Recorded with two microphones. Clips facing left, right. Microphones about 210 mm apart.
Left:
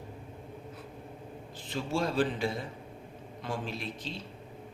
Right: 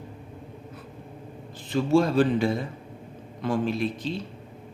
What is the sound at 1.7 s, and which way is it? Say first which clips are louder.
Speech: right 10 dB; 55° right (ahead or behind).